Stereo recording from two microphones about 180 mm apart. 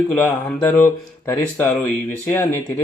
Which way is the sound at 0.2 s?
10° left (ahead or behind).